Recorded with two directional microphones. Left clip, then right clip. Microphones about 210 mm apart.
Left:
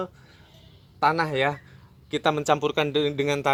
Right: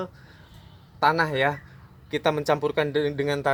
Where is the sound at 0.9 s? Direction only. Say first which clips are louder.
Right 1 dB; 30° left (ahead or behind).